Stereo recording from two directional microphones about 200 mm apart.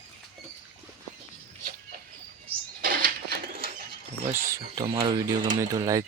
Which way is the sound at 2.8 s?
45° right (ahead or behind).